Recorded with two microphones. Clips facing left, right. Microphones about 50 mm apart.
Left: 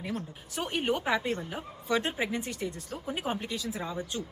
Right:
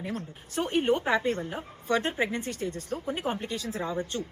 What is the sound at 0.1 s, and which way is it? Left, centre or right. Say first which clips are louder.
Speech: right 1 dB; right.